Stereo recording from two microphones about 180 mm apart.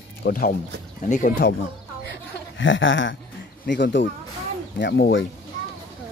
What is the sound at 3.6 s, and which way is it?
Speech, 75° left (ahead or behind).